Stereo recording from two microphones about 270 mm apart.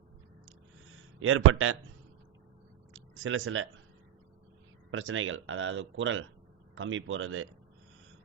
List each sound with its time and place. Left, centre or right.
1.2 s speech: right
2.9 s a sound: right
4.9 s speech: right